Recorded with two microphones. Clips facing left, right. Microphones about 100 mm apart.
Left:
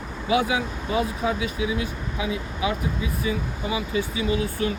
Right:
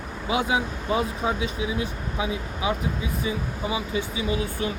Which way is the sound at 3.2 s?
25° right (ahead or behind).